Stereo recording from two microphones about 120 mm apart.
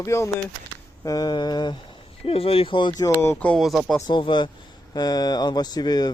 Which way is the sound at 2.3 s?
50° left (ahead or behind).